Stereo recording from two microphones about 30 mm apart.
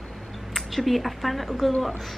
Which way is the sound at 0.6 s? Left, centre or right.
Centre.